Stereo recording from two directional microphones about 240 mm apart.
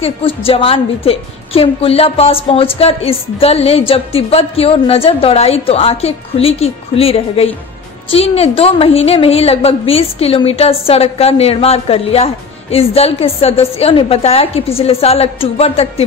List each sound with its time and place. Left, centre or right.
0.0 s a woman's voice: left